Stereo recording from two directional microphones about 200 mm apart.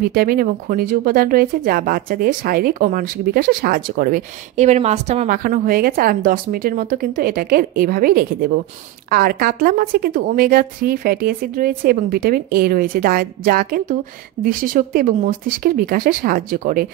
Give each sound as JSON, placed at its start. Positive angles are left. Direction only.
{"t": 0.0, "sound": "speech", "side_deg": -45}